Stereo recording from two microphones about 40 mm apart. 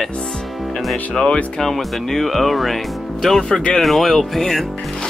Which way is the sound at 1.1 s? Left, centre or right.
Centre.